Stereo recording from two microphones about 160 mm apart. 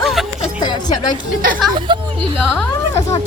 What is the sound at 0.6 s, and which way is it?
Speech, 25° left (ahead or behind).